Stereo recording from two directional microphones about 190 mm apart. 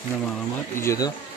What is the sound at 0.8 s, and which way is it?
Speech, 20° left (ahead or behind).